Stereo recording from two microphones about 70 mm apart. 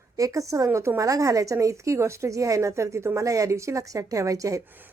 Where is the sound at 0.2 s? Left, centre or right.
Right.